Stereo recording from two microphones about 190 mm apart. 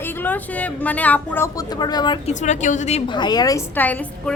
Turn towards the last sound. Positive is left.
turn(degrees=10)  # may be behind; listen again after turning